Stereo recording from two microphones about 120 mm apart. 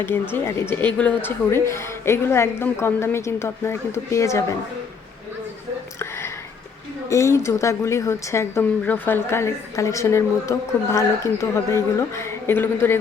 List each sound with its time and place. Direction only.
0.0 s a woman's voice: 20° left (ahead or behind)
1.5 s a woman's voice: 25° left (ahead or behind)
6.0 s a sound: 20° left (ahead or behind)
7.1 s a woman's voice: 25° left (ahead or behind)